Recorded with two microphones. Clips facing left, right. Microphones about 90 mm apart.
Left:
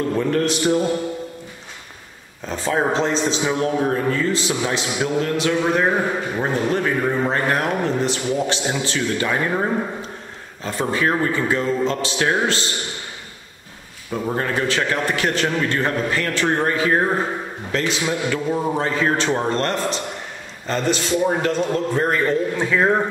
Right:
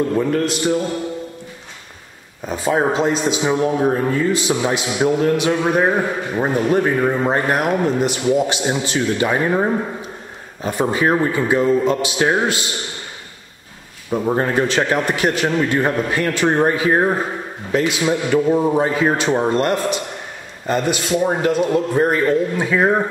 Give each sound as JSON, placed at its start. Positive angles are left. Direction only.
{"t": 0.3, "sound": "mantra", "side_deg": 0}
{"t": 2.4, "sound": "a man's voice", "side_deg": -10}
{"t": 14.1, "sound": "a man's voice", "side_deg": -20}